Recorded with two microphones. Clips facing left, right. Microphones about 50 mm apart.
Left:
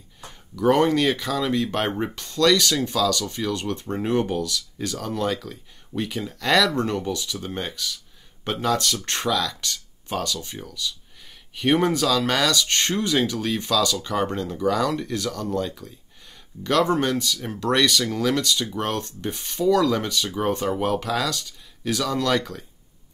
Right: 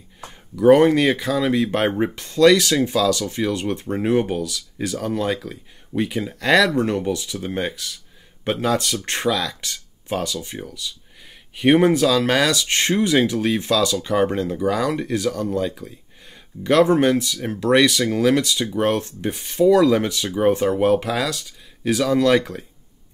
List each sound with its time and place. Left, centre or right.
0.6 s speech: centre